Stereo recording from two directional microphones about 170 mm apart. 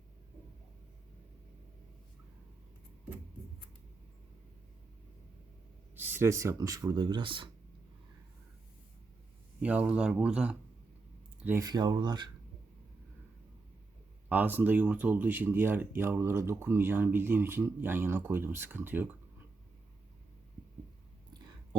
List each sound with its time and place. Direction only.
6.0 s speech: 15° right (ahead or behind); by 7.5 s 30° right (ahead or behind)
9.6 s speech: 10° right (ahead or behind)
11.4 s speech: 20° right (ahead or behind)
14.3 s speech: 10° right (ahead or behind)